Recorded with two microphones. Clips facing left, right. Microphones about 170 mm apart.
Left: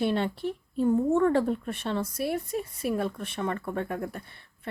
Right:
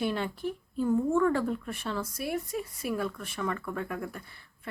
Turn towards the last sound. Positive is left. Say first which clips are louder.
# left 3 dB
turn(degrees=25)  # may be behind; listen again after turning